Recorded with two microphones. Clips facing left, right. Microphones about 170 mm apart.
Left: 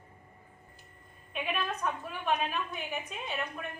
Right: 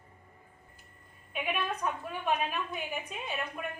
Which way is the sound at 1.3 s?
5° right (ahead or behind).